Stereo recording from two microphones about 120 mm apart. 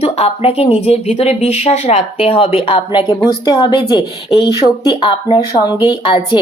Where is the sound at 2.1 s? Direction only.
50° left (ahead or behind).